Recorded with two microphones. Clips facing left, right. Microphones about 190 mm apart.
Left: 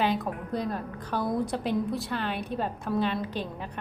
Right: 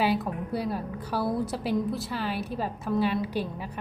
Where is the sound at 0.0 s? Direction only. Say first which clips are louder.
Right 1 dB; 10° right (ahead or behind).